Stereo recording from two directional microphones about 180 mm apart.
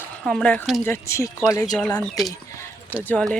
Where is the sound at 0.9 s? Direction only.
15° left (ahead or behind).